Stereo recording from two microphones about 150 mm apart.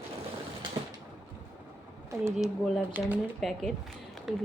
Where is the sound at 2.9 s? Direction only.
10° right (ahead or behind).